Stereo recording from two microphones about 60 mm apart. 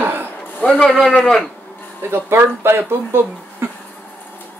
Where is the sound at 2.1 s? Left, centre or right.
Right.